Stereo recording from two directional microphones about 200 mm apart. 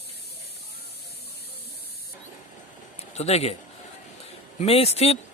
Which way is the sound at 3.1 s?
30° left (ahead or behind).